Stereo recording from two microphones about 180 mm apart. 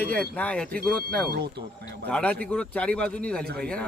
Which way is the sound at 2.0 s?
10° left (ahead or behind).